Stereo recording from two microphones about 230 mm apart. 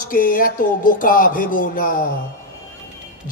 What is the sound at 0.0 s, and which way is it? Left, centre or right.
A woman's voice, left.